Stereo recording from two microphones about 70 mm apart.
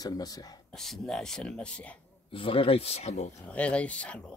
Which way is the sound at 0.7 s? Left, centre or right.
Centre.